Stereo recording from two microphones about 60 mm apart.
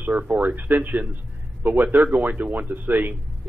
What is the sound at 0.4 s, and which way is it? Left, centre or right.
A man's voice, right.